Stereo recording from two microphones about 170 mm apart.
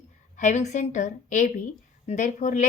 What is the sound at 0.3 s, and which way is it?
A woman's voice, 45° left (ahead or behind).